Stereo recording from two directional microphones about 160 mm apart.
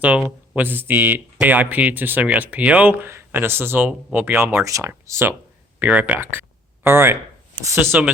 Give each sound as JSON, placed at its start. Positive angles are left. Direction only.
{"t": 0.5, "sound": "speech", "side_deg": -10}